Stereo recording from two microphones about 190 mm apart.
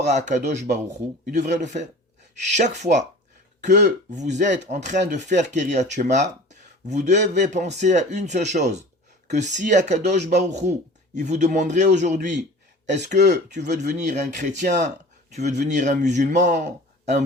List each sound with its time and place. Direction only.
0.0 s speech: 40° right (ahead or behind)